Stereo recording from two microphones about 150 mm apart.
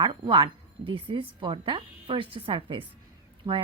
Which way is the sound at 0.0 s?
30° right (ahead or behind).